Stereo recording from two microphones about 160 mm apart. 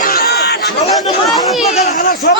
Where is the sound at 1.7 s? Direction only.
45° left (ahead or behind).